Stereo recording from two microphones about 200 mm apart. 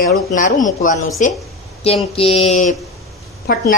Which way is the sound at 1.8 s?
30° left (ahead or behind).